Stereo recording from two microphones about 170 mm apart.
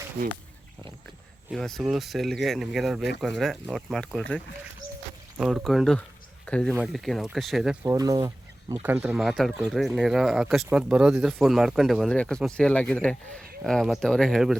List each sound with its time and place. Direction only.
1.5 s speech: centre (ahead or behind)
7.9 s speech: 20° right (ahead or behind)
8.7 s speech: 10° right (ahead or behind)